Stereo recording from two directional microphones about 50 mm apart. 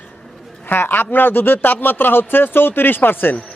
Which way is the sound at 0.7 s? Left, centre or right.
Left.